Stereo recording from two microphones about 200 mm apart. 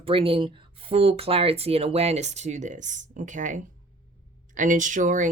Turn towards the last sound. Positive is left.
turn(degrees=-40)  # may be behind; listen again after turning